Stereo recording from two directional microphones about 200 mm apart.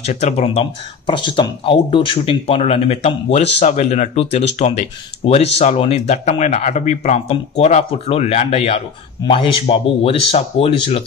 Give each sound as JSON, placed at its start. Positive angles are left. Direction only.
{"t": 0.0, "sound": "speech", "side_deg": 35}